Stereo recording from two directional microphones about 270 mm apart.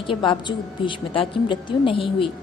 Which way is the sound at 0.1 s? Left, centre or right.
Centre.